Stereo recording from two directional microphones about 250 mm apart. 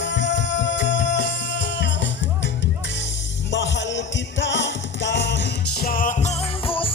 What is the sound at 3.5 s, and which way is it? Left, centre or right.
Music, left.